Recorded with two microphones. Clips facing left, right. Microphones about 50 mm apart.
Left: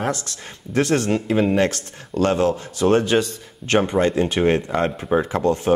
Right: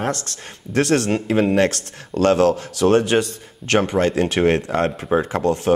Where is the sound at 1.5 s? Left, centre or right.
Right.